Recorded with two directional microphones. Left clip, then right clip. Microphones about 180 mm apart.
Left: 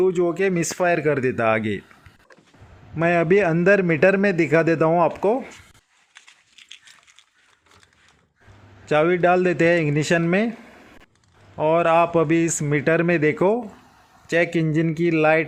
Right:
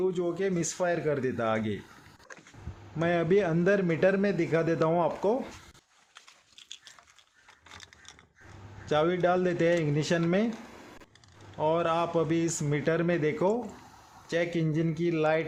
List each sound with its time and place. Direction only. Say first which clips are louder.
0.0 s speech: left 9 dB; 35° left (ahead or behind)
3.0 s a man's voice: left 8 dB; 30° left (ahead or behind)
8.9 s a man's voice: left 8 dB; 25° left (ahead or behind)
11.5 s a man's voice: left 10 dB; 25° left (ahead or behind)